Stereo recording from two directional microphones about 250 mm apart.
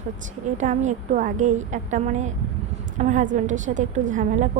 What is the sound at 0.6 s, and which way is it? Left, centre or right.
A woman's voice, right.